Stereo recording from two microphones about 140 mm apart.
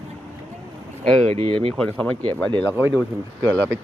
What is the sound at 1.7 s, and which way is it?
Speech, 10° left (ahead or behind).